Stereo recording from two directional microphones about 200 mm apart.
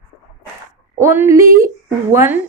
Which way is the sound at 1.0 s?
15° right (ahead or behind).